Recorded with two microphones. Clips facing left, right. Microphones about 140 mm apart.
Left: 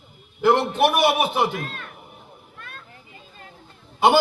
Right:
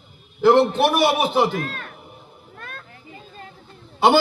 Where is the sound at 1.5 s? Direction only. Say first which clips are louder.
Right 4 dB; 45° right (ahead or behind).